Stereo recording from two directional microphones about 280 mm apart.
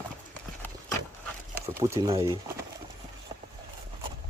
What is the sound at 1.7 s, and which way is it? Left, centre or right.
Speech, centre.